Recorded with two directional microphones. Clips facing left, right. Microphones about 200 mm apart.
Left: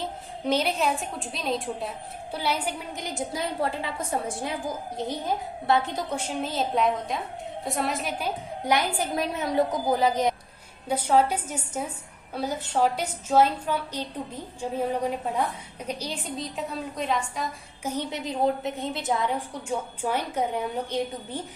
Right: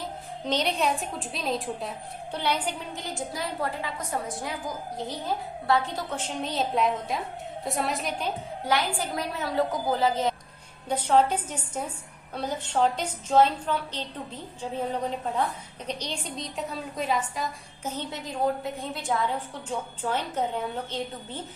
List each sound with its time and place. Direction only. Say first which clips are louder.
0.4 s a woman's voice: left 2 dB; 5° left (ahead or behind)
6.1 s a woman's voice: even; 5° left (ahead or behind)
8.6 s a woman's voice: left 2 dB; 15° left (ahead or behind)
15.9 s a woman's voice: left 1 dB; 5° left (ahead or behind)
17.8 s a woman's voice: left 4 dB; 15° left (ahead or behind)